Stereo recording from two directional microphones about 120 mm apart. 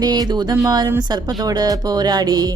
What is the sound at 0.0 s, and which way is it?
Music, 35° right (ahead or behind).